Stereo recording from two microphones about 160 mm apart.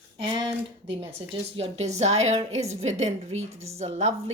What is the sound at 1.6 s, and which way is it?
A woman's voice, 45° right (ahead or behind).